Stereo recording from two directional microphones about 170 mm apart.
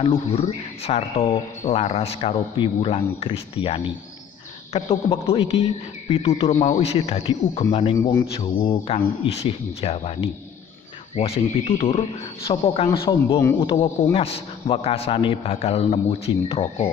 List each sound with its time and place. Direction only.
0.0 s speech: 35° left (ahead or behind)
13.4 s speech: 15° left (ahead or behind)
14.1 s speech: 35° left (ahead or behind)